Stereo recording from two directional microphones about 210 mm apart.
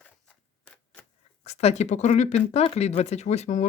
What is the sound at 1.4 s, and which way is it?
Speech, 30° left (ahead or behind).